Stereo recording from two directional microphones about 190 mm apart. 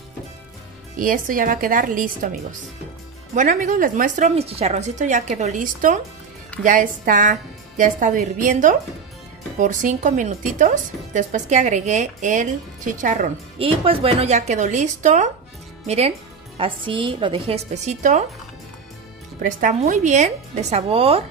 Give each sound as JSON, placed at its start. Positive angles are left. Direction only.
{"t": 0.9, "sound": "a woman's voice", "side_deg": -45}
{"t": 3.3, "sound": "a woman's voice", "side_deg": -40}
{"t": 13.6, "sound": "speech", "side_deg": -30}
{"t": 16.5, "sound": "a woman's voice", "side_deg": -25}
{"t": 19.4, "sound": "speech", "side_deg": -40}